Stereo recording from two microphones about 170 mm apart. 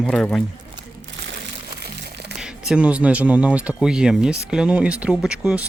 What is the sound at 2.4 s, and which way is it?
Speech, 5° right (ahead or behind).